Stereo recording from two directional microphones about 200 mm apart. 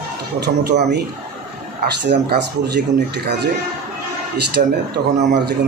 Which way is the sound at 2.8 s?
55° right (ahead or behind).